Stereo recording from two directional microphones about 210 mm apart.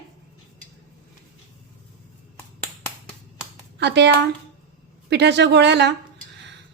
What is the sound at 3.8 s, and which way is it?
A woman's voice, 55° right (ahead or behind).